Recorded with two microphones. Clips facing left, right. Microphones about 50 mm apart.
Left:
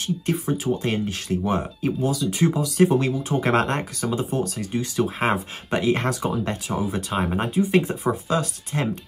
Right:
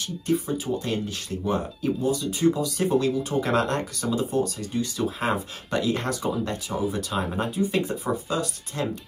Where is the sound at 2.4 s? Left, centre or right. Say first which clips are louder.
Right 1 dB; left.